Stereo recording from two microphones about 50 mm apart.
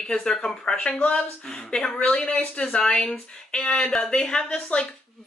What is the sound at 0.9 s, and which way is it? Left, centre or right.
Speech, left.